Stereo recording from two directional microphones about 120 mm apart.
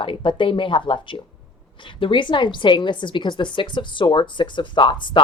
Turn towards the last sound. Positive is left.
turn(degrees=40)  # may be behind; listen again after turning